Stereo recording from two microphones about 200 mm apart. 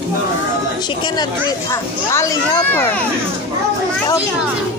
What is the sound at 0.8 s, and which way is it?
Speech, 25° left (ahead or behind).